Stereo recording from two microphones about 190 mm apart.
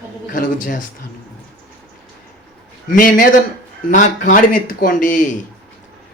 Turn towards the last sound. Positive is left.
turn(degrees=45)  # may be behind; listen again after turning